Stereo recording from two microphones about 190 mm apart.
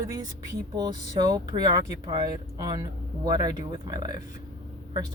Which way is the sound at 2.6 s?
20° right (ahead or behind).